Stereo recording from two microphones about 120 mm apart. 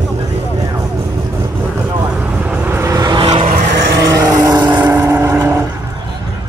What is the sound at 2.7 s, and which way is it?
Vehicle, 25° right (ahead or behind).